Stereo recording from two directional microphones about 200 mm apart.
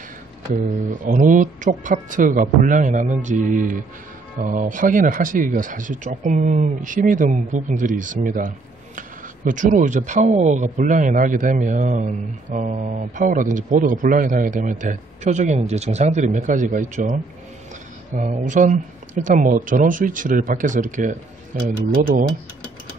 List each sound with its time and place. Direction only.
0.8 s speech: 40° right (ahead or behind)
18.2 s speech: 40° right (ahead or behind)